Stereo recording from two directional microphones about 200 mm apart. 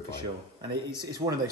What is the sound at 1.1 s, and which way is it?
Speech, 15° right (ahead or behind).